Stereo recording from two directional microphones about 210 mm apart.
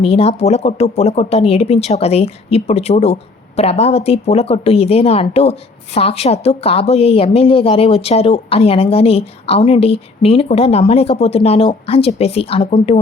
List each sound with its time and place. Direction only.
0.0 s speech: 30° left (ahead or behind)